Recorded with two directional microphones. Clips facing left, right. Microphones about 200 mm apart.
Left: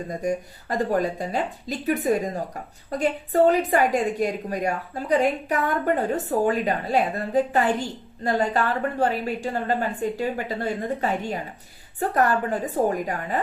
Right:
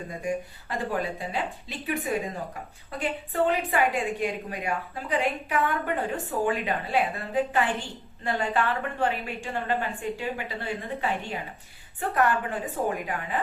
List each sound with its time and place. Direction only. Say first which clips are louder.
0.1 s a woman's voice: left 4 dB; 40° left (ahead or behind)